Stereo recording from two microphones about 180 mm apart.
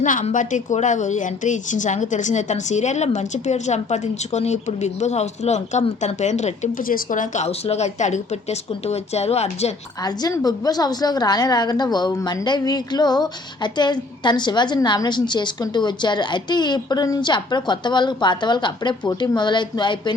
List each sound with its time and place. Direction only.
0.0 s a woman's voice: 45° left (ahead or behind)
10.0 s a woman's voice: 20° left (ahead or behind)